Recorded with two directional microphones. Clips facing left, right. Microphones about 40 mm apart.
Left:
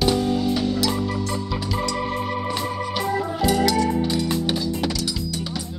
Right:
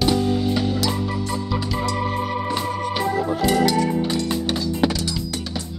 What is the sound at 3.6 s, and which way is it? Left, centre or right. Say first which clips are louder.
Music: even; centre.